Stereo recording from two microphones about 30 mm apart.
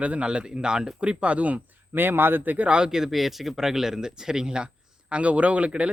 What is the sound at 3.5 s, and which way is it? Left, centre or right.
Speech, centre.